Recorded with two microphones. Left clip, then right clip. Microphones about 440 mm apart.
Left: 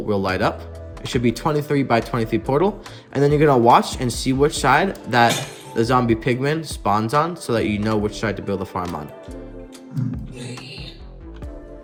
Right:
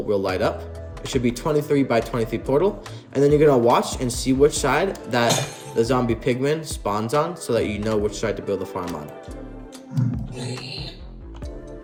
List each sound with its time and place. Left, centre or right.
0.1 s speech: centre